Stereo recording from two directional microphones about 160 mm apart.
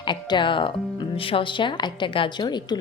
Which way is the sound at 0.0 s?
30° left (ahead or behind).